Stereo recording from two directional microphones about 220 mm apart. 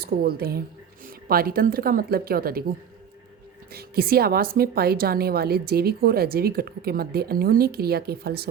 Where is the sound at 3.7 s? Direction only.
45° right (ahead or behind).